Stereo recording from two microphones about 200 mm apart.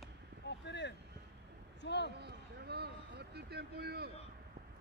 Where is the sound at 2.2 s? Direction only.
55° right (ahead or behind).